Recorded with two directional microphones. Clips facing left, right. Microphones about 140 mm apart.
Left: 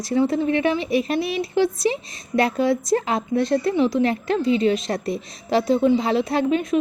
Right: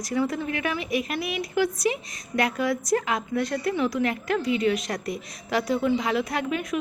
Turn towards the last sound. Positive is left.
turn(degrees=25)  # may be behind; listen again after turning